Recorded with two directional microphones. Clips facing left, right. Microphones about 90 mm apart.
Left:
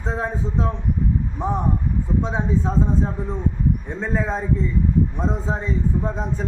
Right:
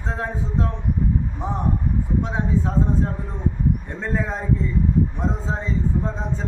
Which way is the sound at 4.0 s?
15° left (ahead or behind).